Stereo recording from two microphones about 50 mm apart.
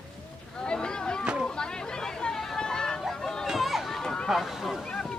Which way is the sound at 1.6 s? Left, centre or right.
Centre.